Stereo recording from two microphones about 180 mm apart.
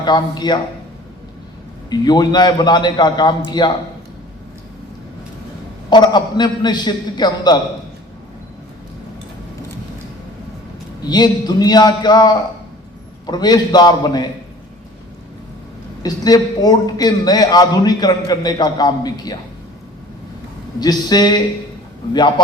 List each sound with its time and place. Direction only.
0.0 s a man's voice: 25° left (ahead or behind)
1.9 s a man's voice: 25° left (ahead or behind)
5.9 s a man's voice: 25° left (ahead or behind)
11.1 s a man's voice: 20° left (ahead or behind)
16.0 s a man's voice: 20° left (ahead or behind)
20.7 s a man's voice: 20° left (ahead or behind)